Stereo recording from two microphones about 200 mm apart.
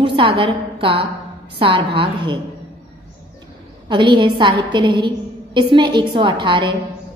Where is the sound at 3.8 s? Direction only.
25° right (ahead or behind).